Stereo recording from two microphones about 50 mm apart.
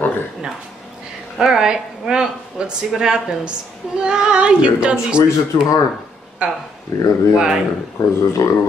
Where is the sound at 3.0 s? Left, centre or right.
Centre.